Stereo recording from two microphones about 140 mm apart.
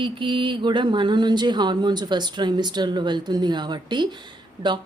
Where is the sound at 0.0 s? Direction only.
35° right (ahead or behind).